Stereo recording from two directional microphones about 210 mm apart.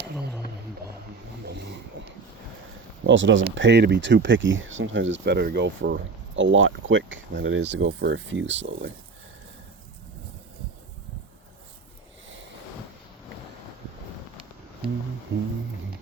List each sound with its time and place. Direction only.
0.0 s a sound: 50° right (ahead or behind)
1.5 s vehicle: 55° right (ahead or behind)
3.0 s speech: 60° right (ahead or behind)